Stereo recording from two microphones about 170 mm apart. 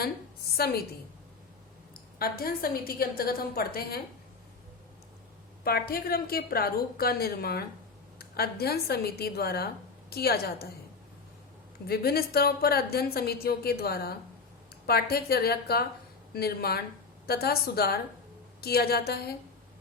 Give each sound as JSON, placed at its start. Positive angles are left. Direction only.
{"t": 0.5, "sound": "a woman's voice", "side_deg": 65}
{"t": 1.9, "sound": "a woman's voice", "side_deg": 65}
{"t": 5.6, "sound": "a woman's voice", "side_deg": 65}
{"t": 11.9, "sound": "a woman's voice", "side_deg": 65}